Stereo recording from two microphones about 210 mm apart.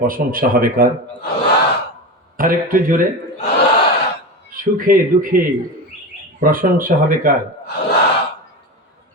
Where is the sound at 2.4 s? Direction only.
40° right (ahead or behind).